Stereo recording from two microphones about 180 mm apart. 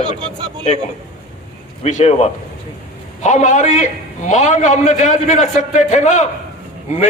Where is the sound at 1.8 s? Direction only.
40° left (ahead or behind).